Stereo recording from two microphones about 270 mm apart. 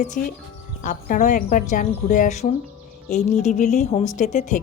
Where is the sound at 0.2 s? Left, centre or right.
Left.